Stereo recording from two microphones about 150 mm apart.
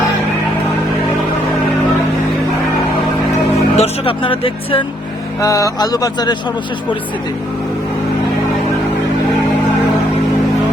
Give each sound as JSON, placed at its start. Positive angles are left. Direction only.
{"t": 3.8, "sound": "speech", "side_deg": 35}
{"t": 5.4, "sound": "speech", "side_deg": 20}